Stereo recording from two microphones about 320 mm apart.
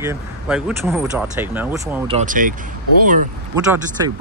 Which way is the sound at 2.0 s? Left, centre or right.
Right.